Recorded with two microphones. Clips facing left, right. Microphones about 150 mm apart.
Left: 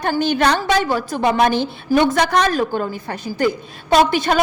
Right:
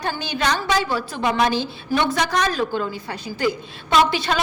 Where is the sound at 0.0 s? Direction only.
55° left (ahead or behind).